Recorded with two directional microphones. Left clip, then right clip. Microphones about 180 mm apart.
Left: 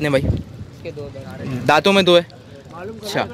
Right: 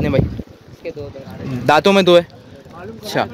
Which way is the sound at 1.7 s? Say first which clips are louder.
Right 2 dB; 10° right (ahead or behind).